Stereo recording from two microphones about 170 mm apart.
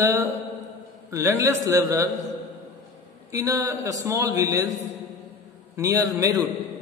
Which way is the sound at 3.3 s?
20° right (ahead or behind).